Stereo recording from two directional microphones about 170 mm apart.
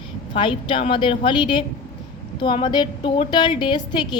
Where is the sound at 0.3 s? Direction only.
30° left (ahead or behind).